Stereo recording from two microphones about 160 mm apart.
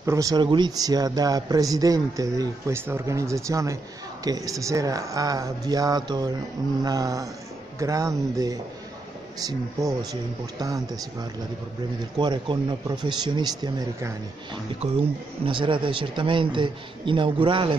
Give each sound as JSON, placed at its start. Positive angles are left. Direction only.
{"t": 0.0, "sound": "speech", "side_deg": -20}
{"t": 14.8, "sound": "a man's voice", "side_deg": -40}